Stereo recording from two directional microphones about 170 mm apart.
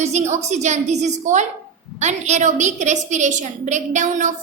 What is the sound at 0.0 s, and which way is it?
A woman's voice, 40° right (ahead or behind).